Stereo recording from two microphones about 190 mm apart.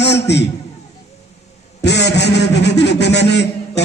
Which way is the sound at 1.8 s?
65° left (ahead or behind).